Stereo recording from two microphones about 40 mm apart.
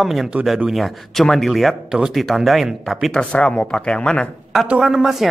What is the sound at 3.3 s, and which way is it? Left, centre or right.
Speech, left.